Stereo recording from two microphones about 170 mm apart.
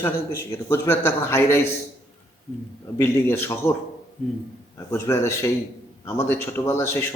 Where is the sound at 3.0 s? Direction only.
15° left (ahead or behind).